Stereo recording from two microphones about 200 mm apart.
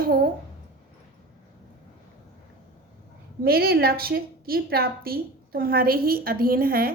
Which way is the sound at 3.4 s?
50° right (ahead or behind).